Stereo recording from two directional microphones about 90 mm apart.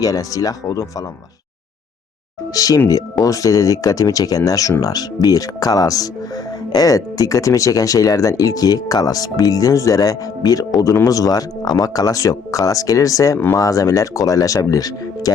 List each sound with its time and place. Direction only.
0.0 s speech: 40° left (ahead or behind)
2.5 s speech: 40° left (ahead or behind)